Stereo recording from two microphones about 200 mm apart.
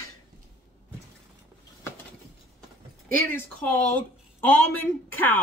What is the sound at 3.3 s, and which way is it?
Speech, 10° left (ahead or behind).